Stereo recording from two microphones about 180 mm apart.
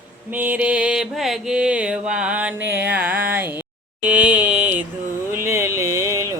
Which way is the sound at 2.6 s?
70° right (ahead or behind).